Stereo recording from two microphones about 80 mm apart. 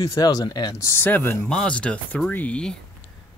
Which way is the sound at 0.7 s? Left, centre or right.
Left.